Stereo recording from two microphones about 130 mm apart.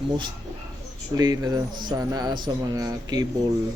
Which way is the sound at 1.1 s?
30° right (ahead or behind).